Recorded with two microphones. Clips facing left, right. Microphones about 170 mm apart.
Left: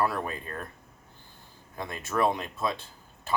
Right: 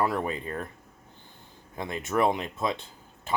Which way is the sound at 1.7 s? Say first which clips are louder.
Right 2 dB; 20° right (ahead or behind).